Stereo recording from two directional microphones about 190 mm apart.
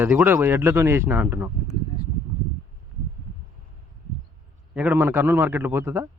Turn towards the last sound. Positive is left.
turn(degrees=-10)  # may be behind; listen again after turning